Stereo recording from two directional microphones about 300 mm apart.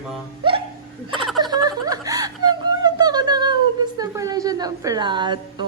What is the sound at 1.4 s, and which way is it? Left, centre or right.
Speech, centre.